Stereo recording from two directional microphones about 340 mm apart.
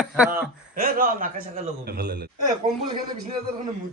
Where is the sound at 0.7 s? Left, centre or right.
Right.